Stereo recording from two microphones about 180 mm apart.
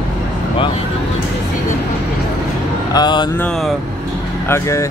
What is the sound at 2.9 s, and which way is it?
Speech, 25° left (ahead or behind).